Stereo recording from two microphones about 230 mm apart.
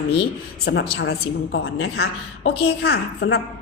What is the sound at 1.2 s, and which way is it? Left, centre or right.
Speech, left.